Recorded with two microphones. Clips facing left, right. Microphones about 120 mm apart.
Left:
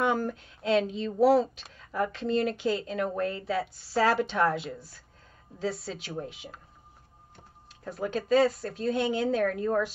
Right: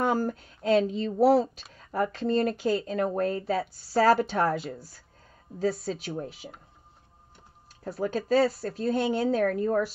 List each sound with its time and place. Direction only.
0.0 s a woman's voice: 40° right (ahead or behind)
7.8 s a woman's voice: 40° right (ahead or behind)